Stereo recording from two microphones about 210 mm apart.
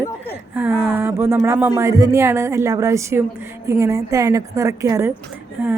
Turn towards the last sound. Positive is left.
turn(degrees=-10)  # may be behind; listen again after turning